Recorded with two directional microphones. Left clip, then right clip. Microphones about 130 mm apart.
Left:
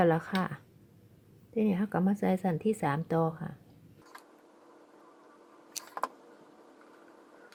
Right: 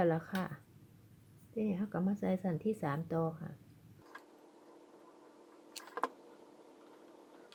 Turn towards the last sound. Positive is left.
turn(degrees=15)  # may be behind; listen again after turning